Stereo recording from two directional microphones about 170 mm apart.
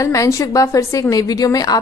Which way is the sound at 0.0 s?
20° left (ahead or behind).